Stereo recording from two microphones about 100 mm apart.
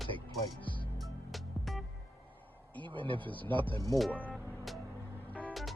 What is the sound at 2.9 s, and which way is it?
Speech, 55° right (ahead or behind).